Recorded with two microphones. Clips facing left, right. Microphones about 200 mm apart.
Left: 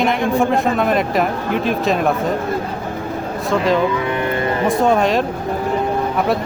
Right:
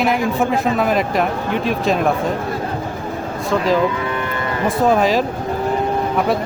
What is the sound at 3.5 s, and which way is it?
Speech, centre (ahead or behind).